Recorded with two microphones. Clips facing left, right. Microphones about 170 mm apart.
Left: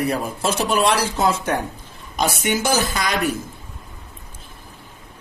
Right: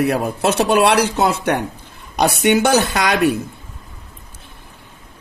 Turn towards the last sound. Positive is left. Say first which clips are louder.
# right 6 dB
turn(degrees=-70)  # may be behind; listen again after turning